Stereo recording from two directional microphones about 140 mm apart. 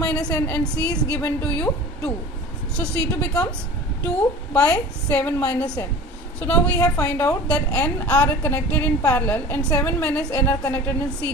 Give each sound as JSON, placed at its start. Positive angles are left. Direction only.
{"t": 0.0, "sound": "a woman's voice", "side_deg": 10}
{"t": 6.8, "sound": "a woman's voice", "side_deg": 10}
{"t": 9.0, "sound": "a woman's voice", "side_deg": 20}
{"t": 9.2, "sound": "a woman's voice", "side_deg": 10}